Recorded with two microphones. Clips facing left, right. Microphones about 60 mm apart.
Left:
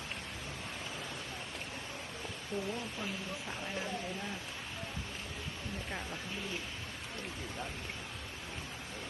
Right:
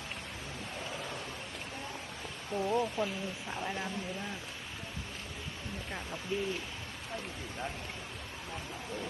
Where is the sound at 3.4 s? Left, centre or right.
Right.